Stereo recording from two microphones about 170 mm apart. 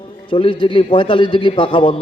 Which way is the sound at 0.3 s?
30° left (ahead or behind).